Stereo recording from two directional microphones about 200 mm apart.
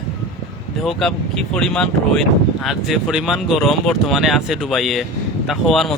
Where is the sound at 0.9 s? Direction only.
Centre (ahead or behind).